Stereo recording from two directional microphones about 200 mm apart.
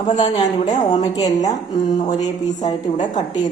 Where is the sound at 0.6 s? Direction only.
35° left (ahead or behind).